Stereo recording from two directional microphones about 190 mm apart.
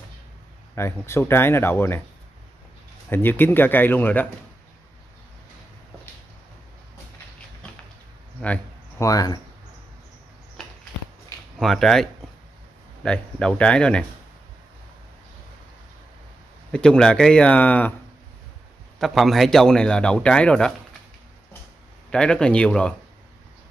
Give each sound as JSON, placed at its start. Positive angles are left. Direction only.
{"t": 0.7, "sound": "speech", "side_deg": 15}
{"t": 3.1, "sound": "speech", "side_deg": 10}
{"t": 8.4, "sound": "speech", "side_deg": 10}
{"t": 11.5, "sound": "a man's voice", "side_deg": 0}
{"t": 16.7, "sound": "a man's voice", "side_deg": 5}
{"t": 18.9, "sound": "a man's voice", "side_deg": 0}
{"t": 22.1, "sound": "a man's voice", "side_deg": 5}